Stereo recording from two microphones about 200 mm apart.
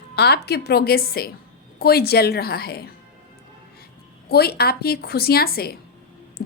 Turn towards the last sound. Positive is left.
turn(degrees=50)  # may be behind; listen again after turning